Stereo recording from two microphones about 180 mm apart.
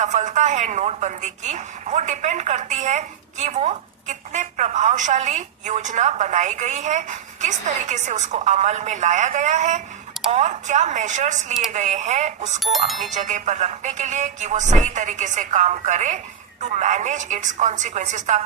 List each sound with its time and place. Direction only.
0.0 s a woman's voice: 40° right (ahead or behind)
12.5 s speech: centre (ahead or behind)
13.1 s a woman's voice: 40° right (ahead or behind)